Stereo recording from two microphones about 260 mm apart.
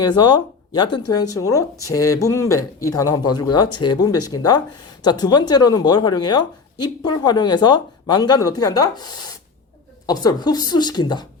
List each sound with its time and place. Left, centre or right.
0.2 s speech: centre
10.1 s speech: centre